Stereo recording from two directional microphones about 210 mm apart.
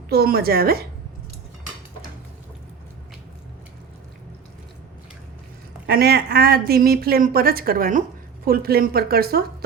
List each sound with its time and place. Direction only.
0.1 s a woman's voice: 45° right (ahead or behind)
5.8 s a woman's voice: 50° right (ahead or behind)